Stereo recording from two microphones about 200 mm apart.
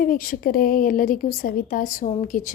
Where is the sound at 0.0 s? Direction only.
45° left (ahead or behind).